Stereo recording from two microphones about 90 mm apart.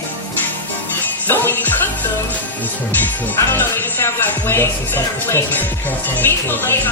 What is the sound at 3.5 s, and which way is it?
Music, 25° left (ahead or behind).